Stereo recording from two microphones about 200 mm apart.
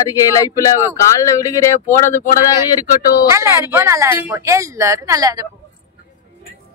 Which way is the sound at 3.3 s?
15° right (ahead or behind).